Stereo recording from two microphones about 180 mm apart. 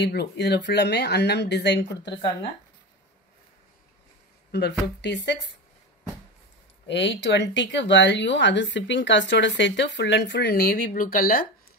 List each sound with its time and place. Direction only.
0.0 s speech: 70° left (ahead or behind)
4.5 s speech: 65° left (ahead or behind)
6.9 s speech: 80° left; by 11.4 s 55° left (ahead or behind)